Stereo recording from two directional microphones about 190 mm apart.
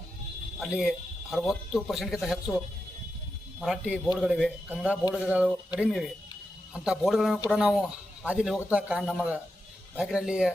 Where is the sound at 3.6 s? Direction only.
5° right (ahead or behind).